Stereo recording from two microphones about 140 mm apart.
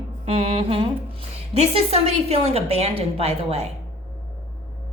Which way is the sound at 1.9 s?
45° right (ahead or behind).